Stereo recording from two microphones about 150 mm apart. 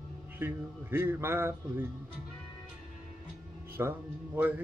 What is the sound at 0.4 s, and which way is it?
Music, 15° right (ahead or behind).